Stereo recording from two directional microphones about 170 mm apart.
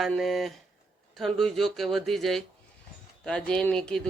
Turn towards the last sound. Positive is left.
turn(degrees=5)  # may be behind; listen again after turning